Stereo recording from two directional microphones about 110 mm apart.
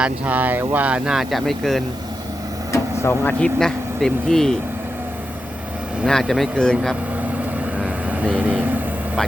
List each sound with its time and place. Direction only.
0.0 s speech: 15° right (ahead or behind); by 1.8 s centre (ahead or behind)
2.7 s vehicle: 25° left (ahead or behind)
3.4 s speech: 5° left (ahead or behind)
6.1 s speech: 5° left (ahead or behind)
8.1 s speech: 15° right (ahead or behind)